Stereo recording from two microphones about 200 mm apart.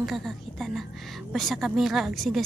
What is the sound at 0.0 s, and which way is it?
A woman's voice, centre (ahead or behind).